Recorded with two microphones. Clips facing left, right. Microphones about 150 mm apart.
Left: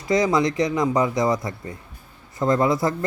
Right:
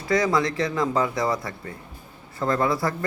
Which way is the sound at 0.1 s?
20° left (ahead or behind).